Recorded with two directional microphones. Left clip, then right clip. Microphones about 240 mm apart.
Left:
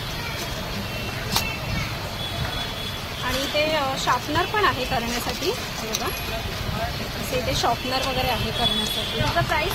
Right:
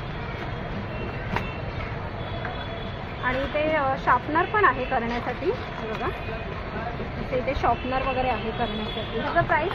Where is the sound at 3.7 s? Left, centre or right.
Left.